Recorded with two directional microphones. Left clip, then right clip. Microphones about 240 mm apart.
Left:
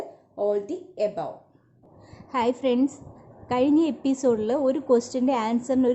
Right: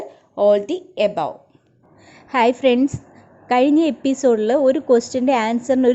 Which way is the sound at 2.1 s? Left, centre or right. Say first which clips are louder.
Right 8 dB; centre.